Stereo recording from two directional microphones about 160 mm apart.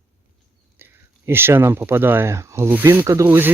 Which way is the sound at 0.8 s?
15° right (ahead or behind).